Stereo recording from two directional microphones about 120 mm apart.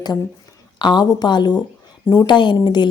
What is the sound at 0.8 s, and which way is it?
Speech, 35° left (ahead or behind).